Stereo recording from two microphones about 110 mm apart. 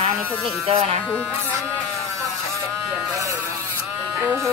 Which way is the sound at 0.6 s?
65° right (ahead or behind).